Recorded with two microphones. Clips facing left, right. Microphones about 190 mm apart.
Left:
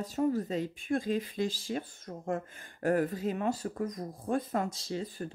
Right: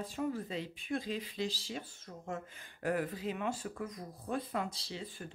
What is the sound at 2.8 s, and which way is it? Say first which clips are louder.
Speech: left 6 dB; 45° left (ahead or behind).